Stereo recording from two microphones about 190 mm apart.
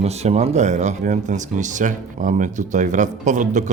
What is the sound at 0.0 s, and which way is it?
Speech, 35° right (ahead or behind).